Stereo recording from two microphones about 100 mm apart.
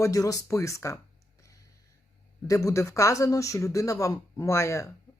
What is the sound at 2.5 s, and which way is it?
Speech, 30° left (ahead or behind).